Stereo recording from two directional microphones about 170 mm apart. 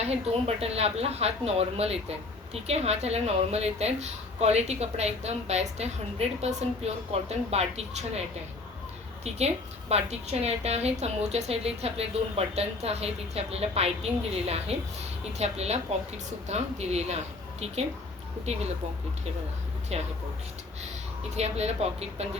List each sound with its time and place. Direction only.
0.0 s speech: 35° right (ahead or behind)
9.9 s speech: 40° right (ahead or behind)
19.9 s speech: 40° right (ahead or behind)
21.2 s speech: 40° right (ahead or behind)